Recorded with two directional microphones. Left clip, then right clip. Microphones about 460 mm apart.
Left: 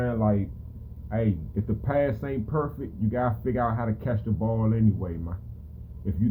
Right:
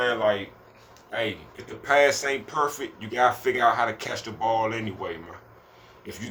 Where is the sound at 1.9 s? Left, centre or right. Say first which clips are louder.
Right 7 dB; centre.